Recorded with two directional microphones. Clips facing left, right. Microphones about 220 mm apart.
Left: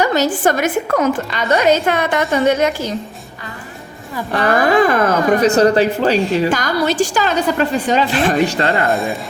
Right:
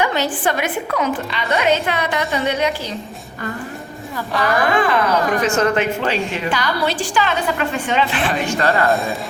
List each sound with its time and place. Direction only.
0.0 s a woman's voice: 40° left (ahead or behind)
4.7 s speech: 45° left (ahead or behind)
8.9 s speech: centre (ahead or behind)